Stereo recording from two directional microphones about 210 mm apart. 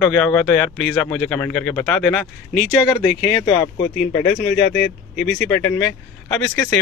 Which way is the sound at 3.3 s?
15° left (ahead or behind).